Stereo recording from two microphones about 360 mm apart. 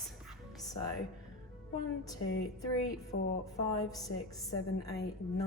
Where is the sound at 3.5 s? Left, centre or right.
Centre.